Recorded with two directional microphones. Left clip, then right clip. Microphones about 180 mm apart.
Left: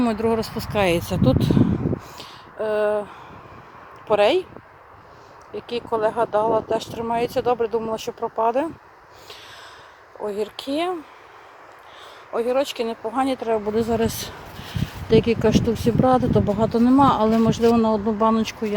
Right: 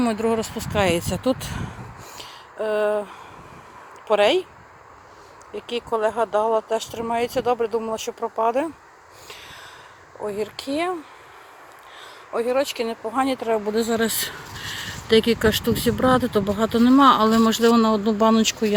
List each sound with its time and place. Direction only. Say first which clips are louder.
0.0 s speech: left 1 dB; centre (ahead or behind)
5.5 s speech: even; 5° left (ahead or behind)
12.3 s speech: even; centre (ahead or behind); by 18.7 s 20° right (ahead or behind)